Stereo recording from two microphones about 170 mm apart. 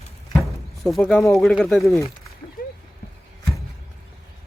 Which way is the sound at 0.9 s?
5° left (ahead or behind).